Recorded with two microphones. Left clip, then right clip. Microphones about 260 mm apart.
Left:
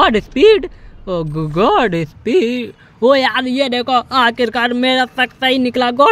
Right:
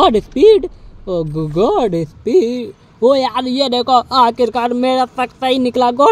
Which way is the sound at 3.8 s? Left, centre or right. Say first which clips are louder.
Right 3 dB; left.